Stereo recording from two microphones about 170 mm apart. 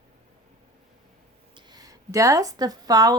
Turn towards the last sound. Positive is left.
turn(degrees=-20)  # may be behind; listen again after turning